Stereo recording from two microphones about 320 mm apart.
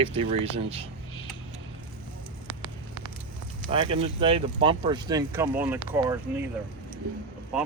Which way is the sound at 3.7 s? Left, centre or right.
Centre.